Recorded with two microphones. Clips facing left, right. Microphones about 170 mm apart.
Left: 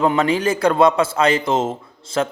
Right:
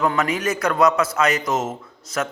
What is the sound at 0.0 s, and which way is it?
A man's voice, 30° left (ahead or behind).